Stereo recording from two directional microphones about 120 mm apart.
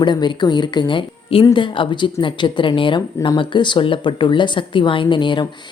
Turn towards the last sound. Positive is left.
turn(degrees=40)  # may be behind; listen again after turning